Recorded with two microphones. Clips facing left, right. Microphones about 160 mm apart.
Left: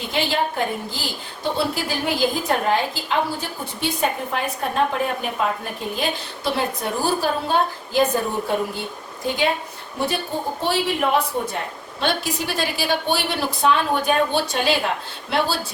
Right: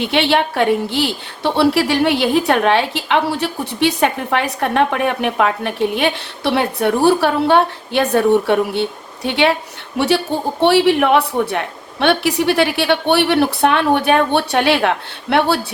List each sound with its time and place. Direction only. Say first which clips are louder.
0.0 s a woman's voice: right 7 dB; 75° right (ahead or behind)
10.0 s speech: right 7 dB; 90° right
10.6 s a woman's voice: right 11 dB; 70° right (ahead or behind)